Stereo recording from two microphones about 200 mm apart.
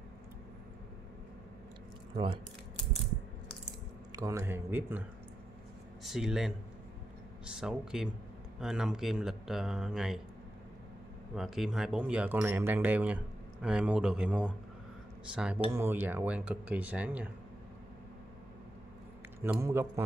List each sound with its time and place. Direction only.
2.1 s speech: 25° right (ahead or behind)
4.1 s speech: 15° right (ahead or behind)
6.0 s speech: centre (ahead or behind)
7.6 s speech: 5° right (ahead or behind)
11.3 s speech: centre (ahead or behind)
19.4 s speech: 10° right (ahead or behind)